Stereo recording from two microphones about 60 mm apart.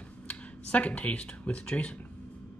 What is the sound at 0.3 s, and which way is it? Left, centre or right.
Speech, left.